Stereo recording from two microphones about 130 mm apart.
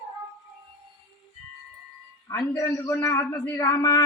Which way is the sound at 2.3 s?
25° left (ahead or behind).